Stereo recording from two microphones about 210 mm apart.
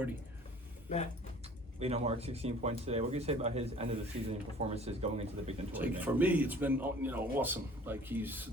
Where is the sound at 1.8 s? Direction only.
30° right (ahead or behind).